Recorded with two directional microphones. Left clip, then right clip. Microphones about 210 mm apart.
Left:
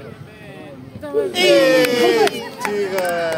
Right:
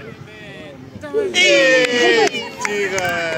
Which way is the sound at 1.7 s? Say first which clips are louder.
Right 1 dB; 50° left (ahead or behind).